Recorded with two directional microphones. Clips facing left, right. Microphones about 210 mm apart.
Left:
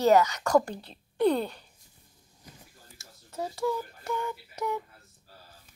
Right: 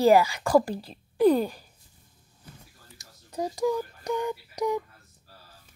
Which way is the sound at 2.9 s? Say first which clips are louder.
Right 4 dB; 15° right (ahead or behind).